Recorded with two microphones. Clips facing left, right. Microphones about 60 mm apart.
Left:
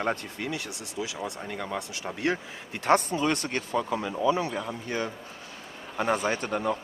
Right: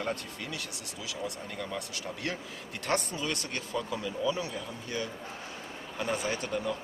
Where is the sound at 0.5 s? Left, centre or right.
Left.